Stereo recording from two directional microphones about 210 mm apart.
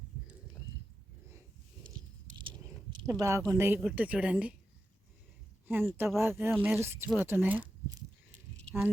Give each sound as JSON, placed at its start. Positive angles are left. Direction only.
{"t": 2.4, "sound": "a sound", "side_deg": -25}
{"t": 3.5, "sound": "speech", "side_deg": -10}
{"t": 5.6, "sound": "speech", "side_deg": -10}